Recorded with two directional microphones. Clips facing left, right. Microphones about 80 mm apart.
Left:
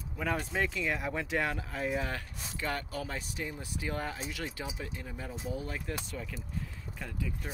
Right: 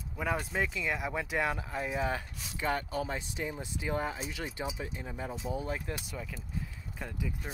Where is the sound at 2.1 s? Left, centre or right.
Right.